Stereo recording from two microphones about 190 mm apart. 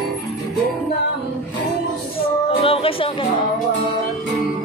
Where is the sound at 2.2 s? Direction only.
30° left (ahead or behind).